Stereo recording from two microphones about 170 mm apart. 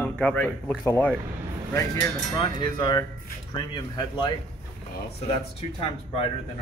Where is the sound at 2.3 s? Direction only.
25° left (ahead or behind).